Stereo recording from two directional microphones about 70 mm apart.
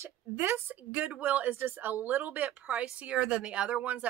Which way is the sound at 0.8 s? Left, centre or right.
Right.